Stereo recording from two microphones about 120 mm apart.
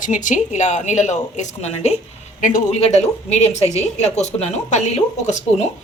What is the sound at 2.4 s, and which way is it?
A woman's voice, 90° left.